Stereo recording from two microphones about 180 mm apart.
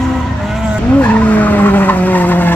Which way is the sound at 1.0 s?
5° left (ahead or behind).